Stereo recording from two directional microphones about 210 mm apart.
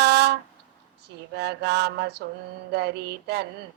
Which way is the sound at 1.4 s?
55° right (ahead or behind).